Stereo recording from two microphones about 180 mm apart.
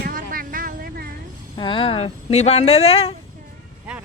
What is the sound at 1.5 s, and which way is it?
Speech, 30° left (ahead or behind).